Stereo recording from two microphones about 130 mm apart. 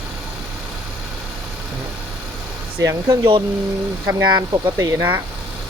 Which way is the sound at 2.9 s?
20° right (ahead or behind).